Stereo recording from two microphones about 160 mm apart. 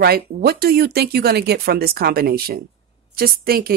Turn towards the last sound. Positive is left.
turn(degrees=-65)  # may be behind; listen again after turning